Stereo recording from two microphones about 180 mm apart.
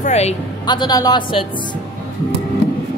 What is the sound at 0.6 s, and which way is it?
Speech, 25° left (ahead or behind).